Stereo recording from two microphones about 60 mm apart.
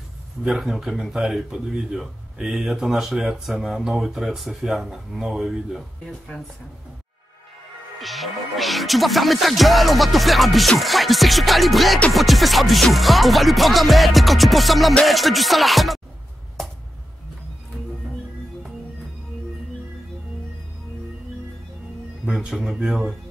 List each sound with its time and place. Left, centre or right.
0.5 s speech: centre
4.0 s music: centre
6.3 s speech: centre
8.0 s music: centre
22.2 s speech: centre